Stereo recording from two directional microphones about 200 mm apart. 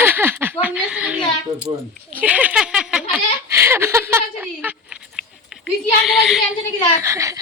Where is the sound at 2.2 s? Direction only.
5° right (ahead or behind).